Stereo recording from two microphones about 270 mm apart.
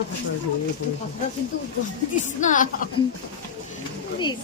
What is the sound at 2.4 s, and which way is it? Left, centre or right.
Speech, left.